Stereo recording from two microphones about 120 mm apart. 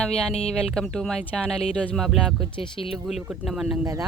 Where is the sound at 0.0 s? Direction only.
5° left (ahead or behind).